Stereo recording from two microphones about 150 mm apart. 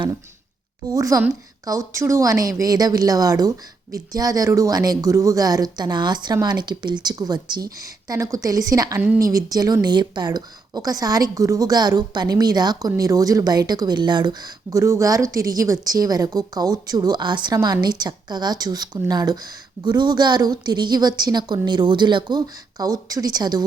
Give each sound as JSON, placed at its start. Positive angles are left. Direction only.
{"t": 0.9, "sound": "speech", "side_deg": -20}
{"t": 9.0, "sound": "a woman's voice", "side_deg": -10}
{"t": 9.2, "sound": "speech", "side_deg": -25}